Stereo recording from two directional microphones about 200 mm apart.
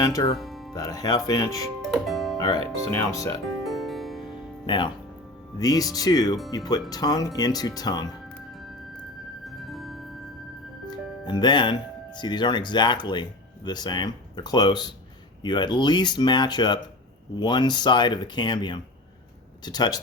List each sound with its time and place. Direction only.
0.0 s speech: 20° left (ahead or behind)
0.3 s music: centre (ahead or behind)
0.7 s speech: 20° left (ahead or behind)
1.8 s music: centre (ahead or behind)
2.4 s speech: 20° left (ahead or behind)
3.6 s music: centre (ahead or behind)
4.6 s speech: 25° left (ahead or behind)
9.5 s music: centre (ahead or behind)
10.8 s speech: 20° left (ahead or behind)